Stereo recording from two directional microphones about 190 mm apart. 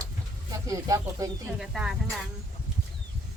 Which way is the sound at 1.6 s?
Centre (ahead or behind).